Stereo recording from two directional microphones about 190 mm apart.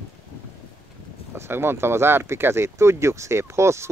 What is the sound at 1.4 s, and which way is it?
A man's voice, 10° right (ahead or behind).